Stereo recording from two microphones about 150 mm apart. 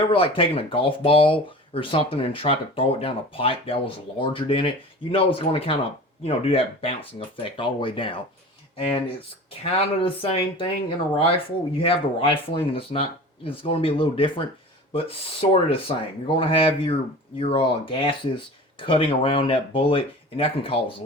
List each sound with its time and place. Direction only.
0.0 s speech: 35° left (ahead or behind)